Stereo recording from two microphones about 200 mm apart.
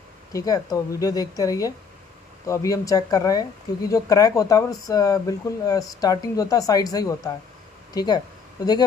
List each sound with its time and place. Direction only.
0.3 s speech: 20° left (ahead or behind)